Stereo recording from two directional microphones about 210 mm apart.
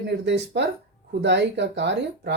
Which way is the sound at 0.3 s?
55° right (ahead or behind).